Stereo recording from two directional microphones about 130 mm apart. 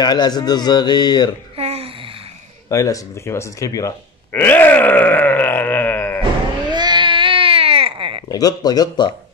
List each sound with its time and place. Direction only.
0.0 s speech: 35° left (ahead or behind)
1.6 s a sound: 50° right (ahead or behind)
2.7 s speech: 25° left (ahead or behind)
6.7 s baby cry: 35° right (ahead or behind)
8.3 s speech: 30° left (ahead or behind)